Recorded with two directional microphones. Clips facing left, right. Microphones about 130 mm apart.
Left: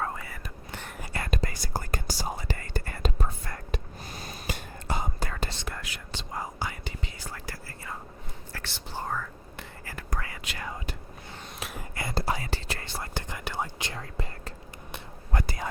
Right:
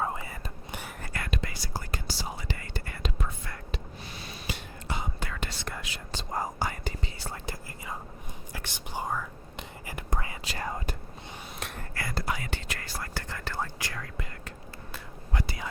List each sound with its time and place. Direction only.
0.0 s whispering: 20° right (ahead or behind)
1.1 s whispering: 35° left (ahead or behind)
6.1 s whispering: 40° right (ahead or behind)
7.2 s whispering: 25° right (ahead or behind)
10.4 s whispering: 35° right (ahead or behind)
11.6 s a sound: 5° left (ahead or behind)
11.9 s whispering: 25° left (ahead or behind)
15.3 s whispering: 45° left (ahead or behind)